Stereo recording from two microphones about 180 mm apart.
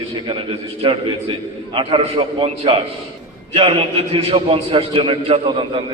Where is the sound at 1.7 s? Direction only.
30° right (ahead or behind).